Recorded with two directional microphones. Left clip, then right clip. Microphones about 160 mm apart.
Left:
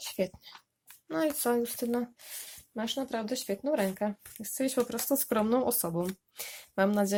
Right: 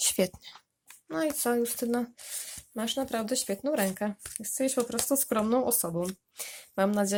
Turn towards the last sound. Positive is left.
turn(degrees=-5)  # may be behind; listen again after turning